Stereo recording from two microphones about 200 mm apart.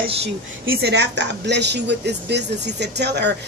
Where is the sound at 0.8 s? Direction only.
55° right (ahead or behind).